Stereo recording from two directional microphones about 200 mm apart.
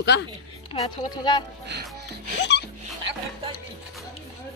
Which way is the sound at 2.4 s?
55° left (ahead or behind).